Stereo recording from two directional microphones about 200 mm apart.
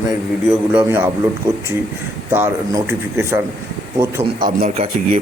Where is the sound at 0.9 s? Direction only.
10° right (ahead or behind).